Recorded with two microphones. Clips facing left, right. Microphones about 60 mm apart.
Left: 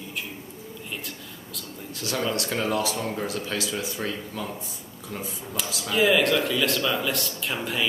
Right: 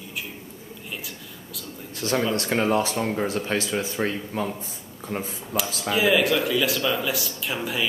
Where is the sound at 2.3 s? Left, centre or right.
Right.